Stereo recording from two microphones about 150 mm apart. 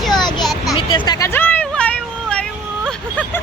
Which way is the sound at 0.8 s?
30° left (ahead or behind).